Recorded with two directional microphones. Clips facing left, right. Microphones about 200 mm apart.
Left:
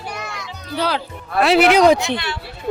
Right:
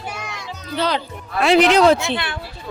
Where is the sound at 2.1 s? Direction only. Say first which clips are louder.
Even; 55° right (ahead or behind).